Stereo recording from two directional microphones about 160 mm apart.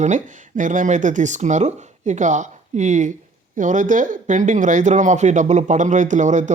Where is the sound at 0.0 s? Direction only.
50° right (ahead or behind).